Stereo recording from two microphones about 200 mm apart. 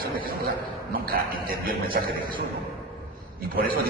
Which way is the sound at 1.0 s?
45° right (ahead or behind).